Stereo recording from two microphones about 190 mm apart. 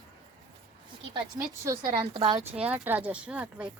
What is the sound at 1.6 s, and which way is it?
Speech, 15° right (ahead or behind).